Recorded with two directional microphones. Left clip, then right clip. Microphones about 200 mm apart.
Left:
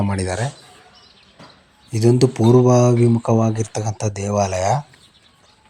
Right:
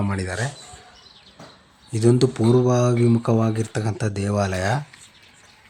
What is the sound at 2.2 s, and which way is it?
Speech, 5° left (ahead or behind).